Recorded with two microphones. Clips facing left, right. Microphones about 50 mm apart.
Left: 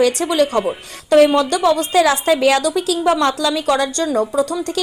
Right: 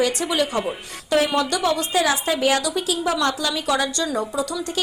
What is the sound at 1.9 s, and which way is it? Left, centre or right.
A woman's voice, left.